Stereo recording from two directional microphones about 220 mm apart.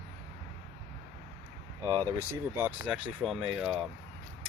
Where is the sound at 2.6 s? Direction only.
5° right (ahead or behind).